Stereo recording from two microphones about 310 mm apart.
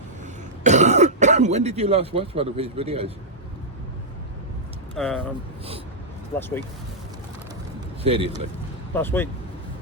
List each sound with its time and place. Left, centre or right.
0.6 s speech: right
4.9 s speech: centre
8.0 s a man's voice: centre
9.0 s speech: centre